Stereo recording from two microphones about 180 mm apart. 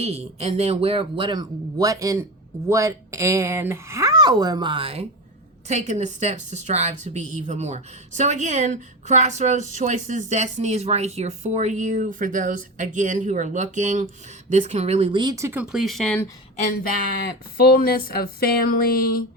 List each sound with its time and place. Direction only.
0.0 s a woman's voice: 35° right (ahead or behind); by 15.6 s 15° right (ahead or behind)
15.7 s speech: centre (ahead or behind)
16.6 s speech: 50° left (ahead or behind)